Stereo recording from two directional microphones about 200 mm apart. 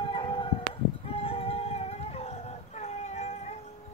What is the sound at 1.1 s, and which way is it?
Music, 30° left (ahead or behind).